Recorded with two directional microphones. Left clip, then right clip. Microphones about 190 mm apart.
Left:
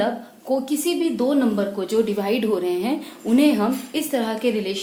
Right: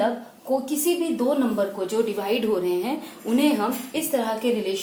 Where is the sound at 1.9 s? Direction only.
35° left (ahead or behind).